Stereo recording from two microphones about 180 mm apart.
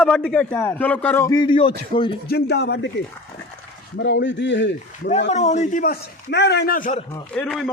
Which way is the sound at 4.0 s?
85° left.